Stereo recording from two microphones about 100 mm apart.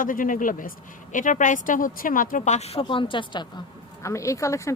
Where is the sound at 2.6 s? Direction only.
90° left.